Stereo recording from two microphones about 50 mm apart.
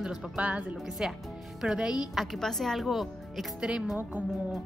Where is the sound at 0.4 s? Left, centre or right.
Right.